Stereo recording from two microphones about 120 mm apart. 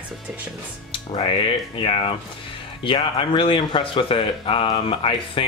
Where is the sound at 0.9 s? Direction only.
50° left (ahead or behind).